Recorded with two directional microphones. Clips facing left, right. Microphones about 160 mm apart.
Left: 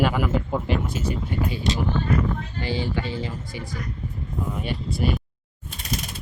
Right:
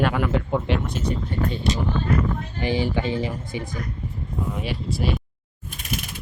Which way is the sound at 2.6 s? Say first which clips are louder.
Right 5 dB; 20° right (ahead or behind).